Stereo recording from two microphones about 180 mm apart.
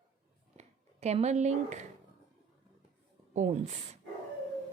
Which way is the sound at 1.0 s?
35° right (ahead or behind).